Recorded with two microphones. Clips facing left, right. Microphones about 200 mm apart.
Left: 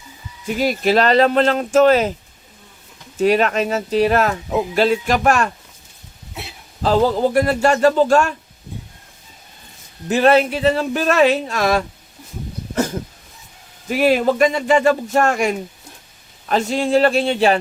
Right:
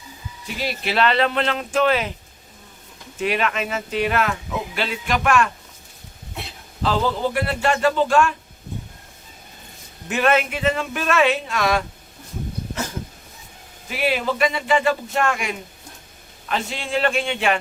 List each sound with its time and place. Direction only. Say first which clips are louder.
0.4 s speech: left 9 dB; 45° left (ahead or behind)
3.2 s speech: left 7 dB; 40° left (ahead or behind)
6.8 s speech: left 6 dB; 40° left (ahead or behind)
10.1 s speech: left 6 dB; 35° left (ahead or behind)
13.8 s speech: left 7 dB; 45° left (ahead or behind)